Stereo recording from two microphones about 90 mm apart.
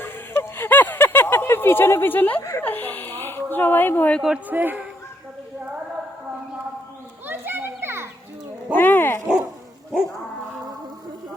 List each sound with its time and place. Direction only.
0.0 s a sound: 25° left (ahead or behind)
2.6 s speech: 20° left (ahead or behind)
4.4 s a man's voice: 20° right (ahead or behind)
7.3 s children playing: 25° right (ahead or behind)
8.7 s dog: 20° left (ahead or behind)
9.9 s dog: 5° right (ahead or behind)